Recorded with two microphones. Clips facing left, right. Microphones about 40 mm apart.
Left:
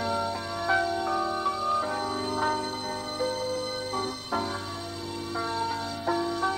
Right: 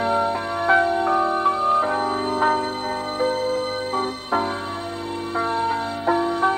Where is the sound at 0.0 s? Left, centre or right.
Right.